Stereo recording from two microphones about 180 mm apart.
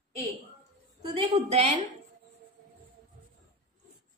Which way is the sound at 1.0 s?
35° right (ahead or behind).